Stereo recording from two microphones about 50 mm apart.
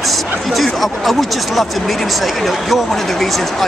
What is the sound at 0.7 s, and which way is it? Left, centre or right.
Speech, centre.